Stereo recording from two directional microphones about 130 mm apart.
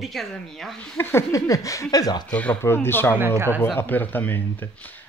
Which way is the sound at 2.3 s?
15° left (ahead or behind).